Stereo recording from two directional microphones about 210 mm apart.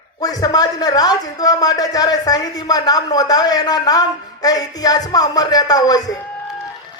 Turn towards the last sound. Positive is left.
turn(degrees=20)  # may be behind; listen again after turning